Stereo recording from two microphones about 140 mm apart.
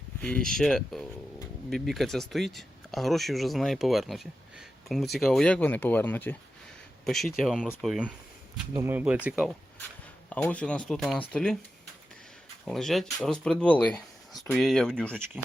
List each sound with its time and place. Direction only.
0.2 s speech: 10° left (ahead or behind)
7.0 s speech: centre (ahead or behind)
8.7 s speech: 15° right (ahead or behind)
10.2 s speech: 10° left (ahead or behind)
12.6 s speech: centre (ahead or behind)